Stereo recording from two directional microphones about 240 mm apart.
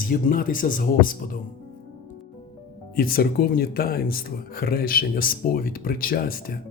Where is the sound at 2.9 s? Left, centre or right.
Left.